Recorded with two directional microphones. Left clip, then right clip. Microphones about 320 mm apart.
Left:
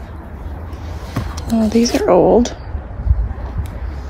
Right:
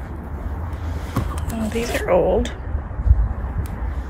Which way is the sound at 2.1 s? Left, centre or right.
Left.